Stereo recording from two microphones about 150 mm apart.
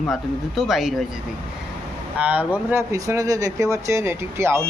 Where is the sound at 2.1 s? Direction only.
10° right (ahead or behind).